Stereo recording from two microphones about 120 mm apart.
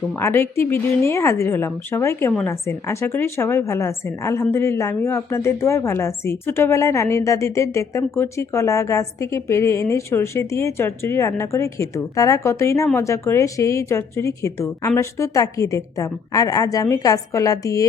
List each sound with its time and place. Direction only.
0.2 s a woman's voice: 20° left (ahead or behind)